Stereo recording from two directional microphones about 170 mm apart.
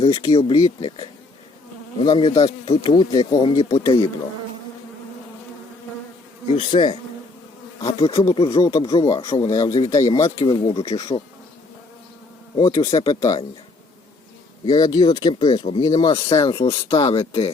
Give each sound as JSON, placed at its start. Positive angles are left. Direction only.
{"t": 0.0, "sound": "speech", "side_deg": 25}
{"t": 6.6, "sound": "speech", "side_deg": 30}
{"t": 8.3, "sound": "speech", "side_deg": 20}
{"t": 8.8, "sound": "speech", "side_deg": 30}
{"t": 9.5, "sound": "speech", "side_deg": 20}
{"t": 10.4, "sound": "speech", "side_deg": 30}
{"t": 12.5, "sound": "speech", "side_deg": 25}
{"t": 14.6, "sound": "speech", "side_deg": 25}